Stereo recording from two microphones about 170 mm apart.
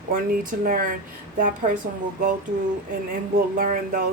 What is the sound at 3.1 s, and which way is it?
Speech, 55° right (ahead or behind).